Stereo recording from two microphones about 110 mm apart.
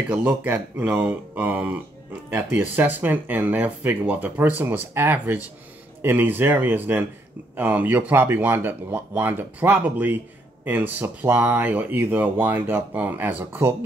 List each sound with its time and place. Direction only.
0.1 s speech: 15° right (ahead or behind)